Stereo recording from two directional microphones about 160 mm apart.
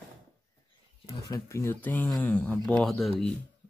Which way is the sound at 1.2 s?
20° left (ahead or behind).